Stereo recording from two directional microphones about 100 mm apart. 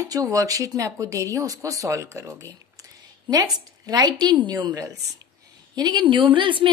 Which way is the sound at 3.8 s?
45° right (ahead or behind).